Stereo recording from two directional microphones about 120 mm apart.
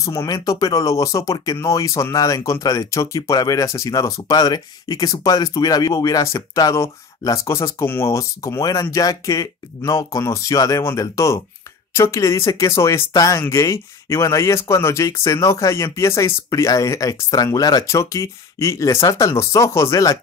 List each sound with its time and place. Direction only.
0.0 s speech: 25° left (ahead or behind)